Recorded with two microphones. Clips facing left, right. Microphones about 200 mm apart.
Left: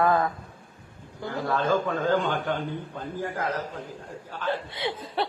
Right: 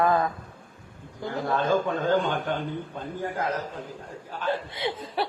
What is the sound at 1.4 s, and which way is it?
Speech, 20° right (ahead or behind).